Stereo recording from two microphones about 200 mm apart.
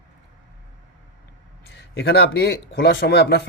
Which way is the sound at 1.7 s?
60° left (ahead or behind).